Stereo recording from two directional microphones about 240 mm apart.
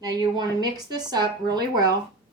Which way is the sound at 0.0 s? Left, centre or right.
Centre.